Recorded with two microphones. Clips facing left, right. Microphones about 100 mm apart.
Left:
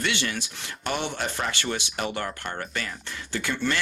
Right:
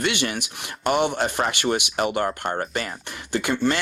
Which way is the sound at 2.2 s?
45° right (ahead or behind).